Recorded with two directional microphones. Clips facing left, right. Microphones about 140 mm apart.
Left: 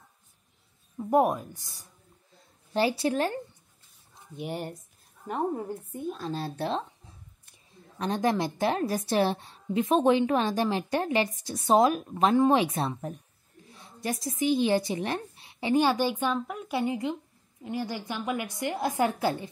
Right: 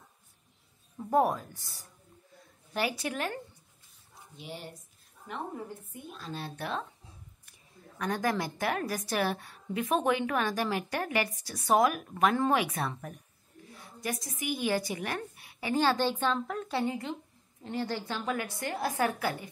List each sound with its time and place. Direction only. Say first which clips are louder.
0.9 s a woman's voice: left 3 dB; 20° left (ahead or behind)
2.7 s a woman's voice: left 7 dB; 30° left (ahead or behind)
4.4 s speech: left 9 dB; 55° left (ahead or behind)
5.3 s a woman's voice: left 8 dB; 45° left (ahead or behind)
8.0 s a woman's voice: left 4 dB; 25° left (ahead or behind)
13.7 s a sound: left 3 dB; 25° left (ahead or behind)
14.4 s a woman's voice: left 7 dB; 25° left (ahead or behind)